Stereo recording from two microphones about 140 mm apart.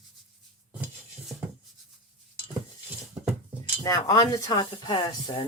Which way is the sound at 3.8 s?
25° left (ahead or behind).